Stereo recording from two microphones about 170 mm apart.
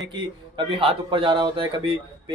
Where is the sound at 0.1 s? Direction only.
30° right (ahead or behind).